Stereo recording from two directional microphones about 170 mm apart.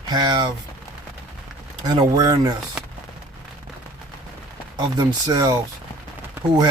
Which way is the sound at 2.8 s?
5° right (ahead or behind).